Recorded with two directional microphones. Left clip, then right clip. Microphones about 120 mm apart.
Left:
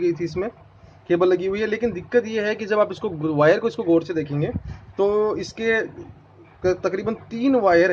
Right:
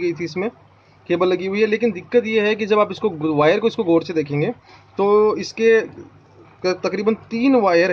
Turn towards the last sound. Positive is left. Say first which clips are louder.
# right 2 dB
turn(degrees=-45)  # may be behind; listen again after turning